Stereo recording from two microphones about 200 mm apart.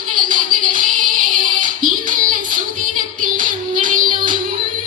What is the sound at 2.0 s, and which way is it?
Child singing, 40° right (ahead or behind).